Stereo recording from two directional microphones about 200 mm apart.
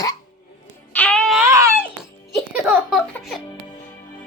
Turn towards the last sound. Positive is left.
turn(degrees=0)  # may be behind; listen again after turning